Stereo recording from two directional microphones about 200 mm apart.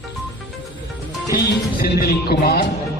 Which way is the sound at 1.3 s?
50° left (ahead or behind).